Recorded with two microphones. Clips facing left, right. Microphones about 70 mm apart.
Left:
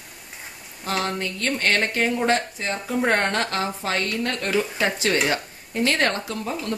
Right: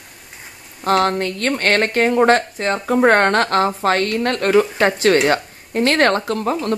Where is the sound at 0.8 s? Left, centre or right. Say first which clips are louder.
Right 9 dB; right.